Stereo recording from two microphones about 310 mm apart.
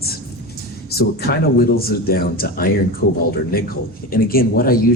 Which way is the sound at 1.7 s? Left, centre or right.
Left.